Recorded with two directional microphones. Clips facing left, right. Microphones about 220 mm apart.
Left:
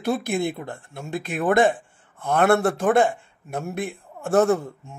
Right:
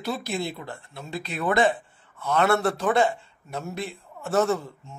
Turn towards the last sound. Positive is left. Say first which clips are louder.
# left 4 dB
turn(degrees=55)  # may be behind; listen again after turning